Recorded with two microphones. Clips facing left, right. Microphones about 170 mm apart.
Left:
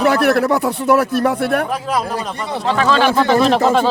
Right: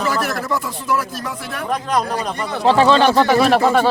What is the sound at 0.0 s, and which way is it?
Speech, 65° left (ahead or behind).